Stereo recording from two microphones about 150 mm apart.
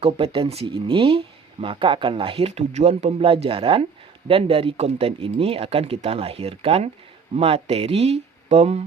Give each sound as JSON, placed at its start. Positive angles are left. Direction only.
{"t": 0.0, "sound": "speech", "side_deg": -35}